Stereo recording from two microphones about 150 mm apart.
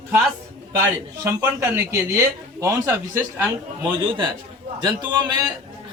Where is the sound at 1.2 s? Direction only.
15° right (ahead or behind).